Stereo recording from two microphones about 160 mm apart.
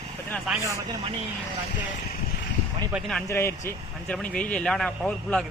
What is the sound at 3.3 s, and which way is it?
A man's voice, 15° left (ahead or behind).